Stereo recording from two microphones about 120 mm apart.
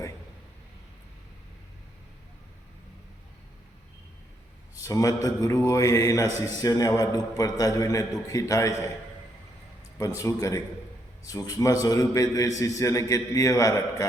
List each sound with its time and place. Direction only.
4.7 s a man's voice: 25° left (ahead or behind)
10.0 s a man's voice: 25° left (ahead or behind)